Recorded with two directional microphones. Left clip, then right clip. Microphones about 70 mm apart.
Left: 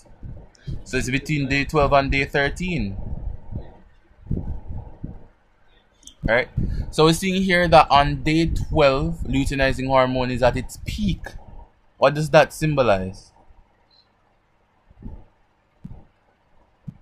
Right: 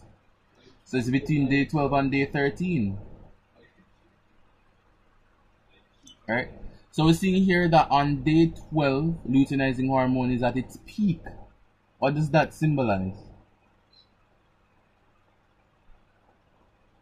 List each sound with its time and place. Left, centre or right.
0.8 s speech: centre
7.0 s speech: centre
12.0 s speech: left